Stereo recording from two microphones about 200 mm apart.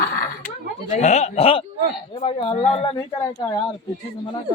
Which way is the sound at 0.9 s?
35° left (ahead or behind).